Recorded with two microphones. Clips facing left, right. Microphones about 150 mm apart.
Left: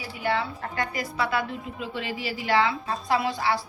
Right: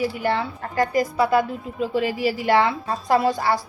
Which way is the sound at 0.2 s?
50° right (ahead or behind).